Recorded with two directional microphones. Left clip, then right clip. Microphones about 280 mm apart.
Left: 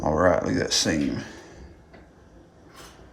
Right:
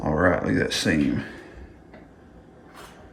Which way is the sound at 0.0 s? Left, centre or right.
Centre.